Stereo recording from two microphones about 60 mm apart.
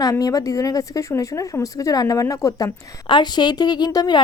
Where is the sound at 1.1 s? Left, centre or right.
Left.